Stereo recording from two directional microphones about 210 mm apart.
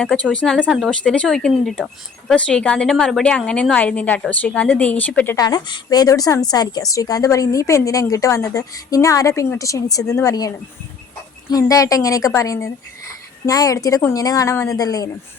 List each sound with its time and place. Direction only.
0.0 s speech: 5° left (ahead or behind)
11.5 s speech: 15° left (ahead or behind)